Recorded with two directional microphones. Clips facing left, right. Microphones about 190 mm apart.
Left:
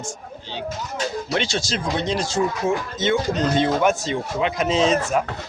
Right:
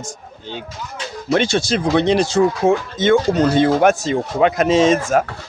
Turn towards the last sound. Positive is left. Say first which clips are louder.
# right 6 dB
turn(degrees=-50)  # may be behind; listen again after turning